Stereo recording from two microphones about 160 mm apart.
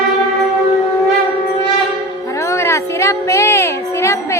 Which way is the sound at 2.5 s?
20° left (ahead or behind).